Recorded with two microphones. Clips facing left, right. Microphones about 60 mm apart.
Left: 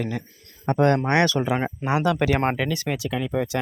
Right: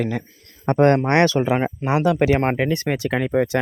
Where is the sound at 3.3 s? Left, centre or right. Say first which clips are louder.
Right 6 dB; right.